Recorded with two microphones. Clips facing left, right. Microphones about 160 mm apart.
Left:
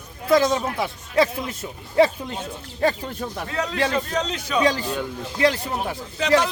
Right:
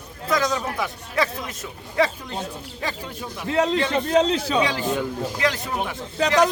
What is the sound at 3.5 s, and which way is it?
Speech, 25° right (ahead or behind).